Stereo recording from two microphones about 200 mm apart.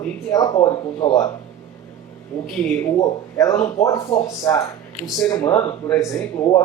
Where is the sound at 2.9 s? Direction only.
15° left (ahead or behind).